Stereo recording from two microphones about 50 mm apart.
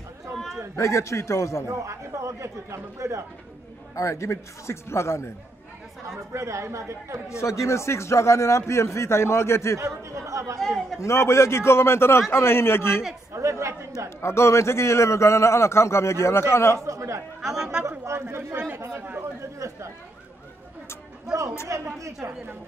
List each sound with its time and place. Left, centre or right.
0.7 s a man's voice: left
1.7 s a man's voice: right
3.9 s a man's voice: left
6.0 s a man's voice: right
7.2 s a man's voice: left
9.8 s speech: right
11.0 s a man's voice: left
13.3 s speech: right
14.2 s a man's voice: left
16.7 s speech: right
17.6 s speech: centre
18.1 s speech: right
21.6 s speech: right